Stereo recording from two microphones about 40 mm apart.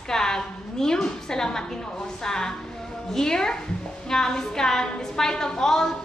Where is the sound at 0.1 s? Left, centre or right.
Centre.